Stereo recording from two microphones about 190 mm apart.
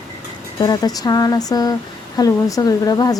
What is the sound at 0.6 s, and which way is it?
A woman's voice, 20° left (ahead or behind).